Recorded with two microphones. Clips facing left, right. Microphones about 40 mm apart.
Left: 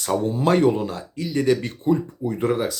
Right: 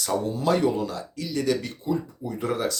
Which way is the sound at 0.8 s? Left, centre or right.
Left.